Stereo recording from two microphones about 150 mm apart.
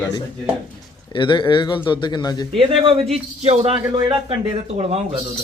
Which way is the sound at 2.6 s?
35° right (ahead or behind).